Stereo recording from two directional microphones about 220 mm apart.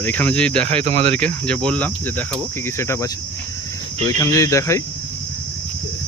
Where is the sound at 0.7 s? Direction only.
30° right (ahead or behind).